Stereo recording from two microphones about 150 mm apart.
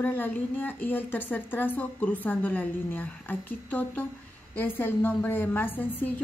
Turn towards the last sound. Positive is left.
turn(degrees=10)  # may be behind; listen again after turning